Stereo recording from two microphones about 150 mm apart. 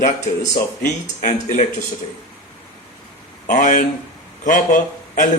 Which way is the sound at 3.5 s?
60° left (ahead or behind).